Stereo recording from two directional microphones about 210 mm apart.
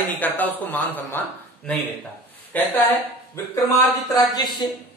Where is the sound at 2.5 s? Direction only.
10° left (ahead or behind).